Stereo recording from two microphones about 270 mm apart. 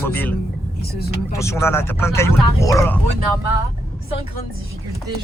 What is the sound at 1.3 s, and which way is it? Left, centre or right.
Speech, centre.